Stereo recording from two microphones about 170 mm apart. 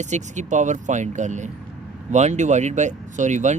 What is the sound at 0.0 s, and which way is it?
Speech, 45° right (ahead or behind).